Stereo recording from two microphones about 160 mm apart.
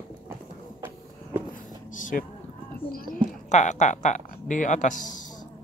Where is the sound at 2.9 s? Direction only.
55° left (ahead or behind).